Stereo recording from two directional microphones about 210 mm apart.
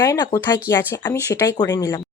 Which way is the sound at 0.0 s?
20° left (ahead or behind).